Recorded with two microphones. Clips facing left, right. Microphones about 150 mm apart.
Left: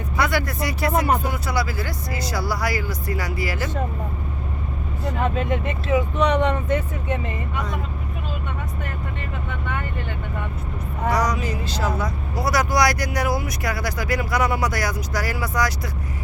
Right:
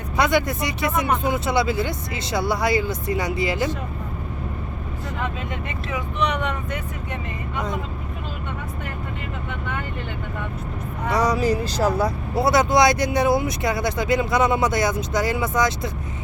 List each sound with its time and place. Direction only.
0.2 s speech: 20° right (ahead or behind)
5.9 s speech: 30° left (ahead or behind)
7.5 s speech: 20° right (ahead or behind)
11.1 s speech: 30° right (ahead or behind)